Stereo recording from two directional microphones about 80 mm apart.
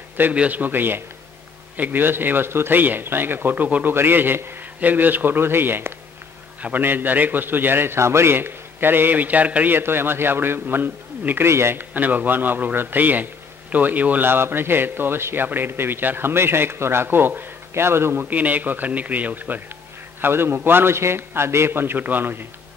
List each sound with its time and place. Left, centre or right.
0.2 s a man's voice: centre
18.3 s a man's voice: right